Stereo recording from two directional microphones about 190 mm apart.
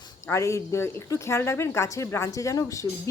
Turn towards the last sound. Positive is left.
turn(degrees=15)  # may be behind; listen again after turning